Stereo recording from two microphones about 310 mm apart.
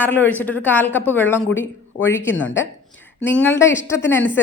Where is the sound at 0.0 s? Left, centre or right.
Centre.